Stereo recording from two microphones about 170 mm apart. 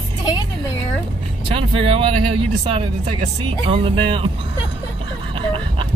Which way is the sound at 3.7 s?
30° right (ahead or behind).